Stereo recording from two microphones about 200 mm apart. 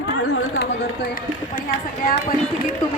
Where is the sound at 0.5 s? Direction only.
50° left (ahead or behind).